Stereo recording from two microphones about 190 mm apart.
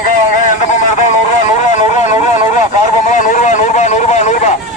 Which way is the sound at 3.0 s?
40° left (ahead or behind).